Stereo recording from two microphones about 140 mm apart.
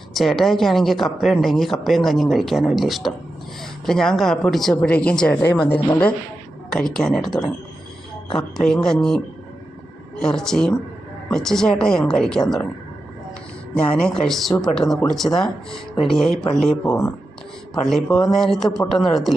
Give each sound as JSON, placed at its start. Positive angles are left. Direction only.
{"t": 0.1, "sound": "speech", "side_deg": 0}
{"t": 8.4, "sound": "speech", "side_deg": 5}
{"t": 13.7, "sound": "speech", "side_deg": 5}
{"t": 16.8, "sound": "speech", "side_deg": 25}
{"t": 17.8, "sound": "speech", "side_deg": 0}